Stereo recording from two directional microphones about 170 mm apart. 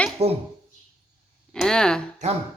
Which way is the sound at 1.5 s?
5° left (ahead or behind).